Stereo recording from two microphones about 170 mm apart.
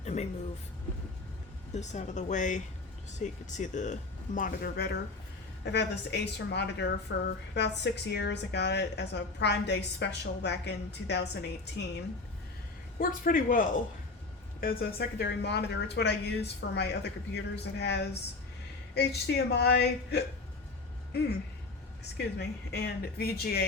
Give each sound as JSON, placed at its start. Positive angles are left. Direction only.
{"t": 0.0, "sound": "speech", "side_deg": 40}
{"t": 1.7, "sound": "speech", "side_deg": 40}
{"t": 5.6, "sound": "a woman's voice", "side_deg": 85}
{"t": 13.0, "sound": "speech", "side_deg": 55}
{"t": 22.4, "sound": "speech", "side_deg": 70}